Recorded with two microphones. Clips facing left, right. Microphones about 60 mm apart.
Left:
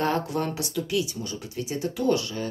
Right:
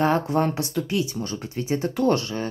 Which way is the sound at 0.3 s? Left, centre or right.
Right.